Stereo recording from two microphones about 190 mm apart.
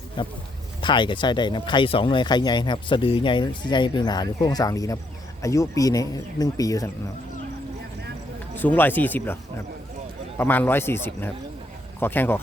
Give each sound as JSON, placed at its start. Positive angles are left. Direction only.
{"t": 0.2, "sound": "speech", "side_deg": 25}
{"t": 8.5, "sound": "speech", "side_deg": 10}